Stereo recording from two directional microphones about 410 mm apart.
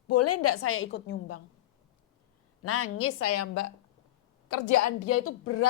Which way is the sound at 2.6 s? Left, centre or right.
Left.